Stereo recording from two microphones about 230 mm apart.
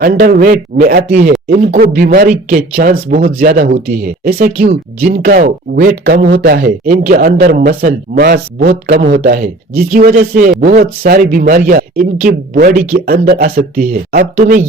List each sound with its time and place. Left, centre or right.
0.0 s a man's voice: right